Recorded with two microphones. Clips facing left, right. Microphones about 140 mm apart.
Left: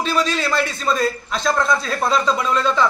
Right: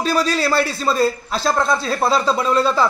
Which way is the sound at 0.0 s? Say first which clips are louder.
Right 2 dB; 40° right (ahead or behind).